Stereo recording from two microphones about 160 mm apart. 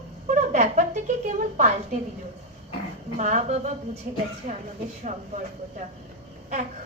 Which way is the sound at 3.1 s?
50° right (ahead or behind).